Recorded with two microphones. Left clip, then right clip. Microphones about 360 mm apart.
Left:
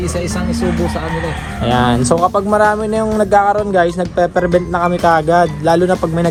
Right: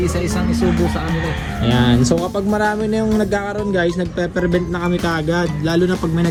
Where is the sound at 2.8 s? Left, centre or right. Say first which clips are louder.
Left 4 dB; left.